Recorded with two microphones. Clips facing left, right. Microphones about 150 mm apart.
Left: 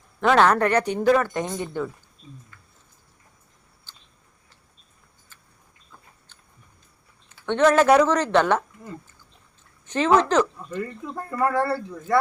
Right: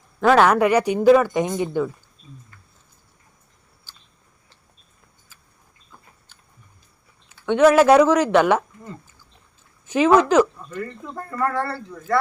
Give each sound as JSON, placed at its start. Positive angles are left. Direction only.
{"t": 0.2, "sound": "speech", "side_deg": -5}
{"t": 5.3, "sound": "vehicle", "side_deg": -5}
{"t": 7.3, "sound": "speech", "side_deg": -5}
{"t": 9.8, "sound": "speech", "side_deg": -10}
{"t": 11.3, "sound": "speech", "side_deg": 15}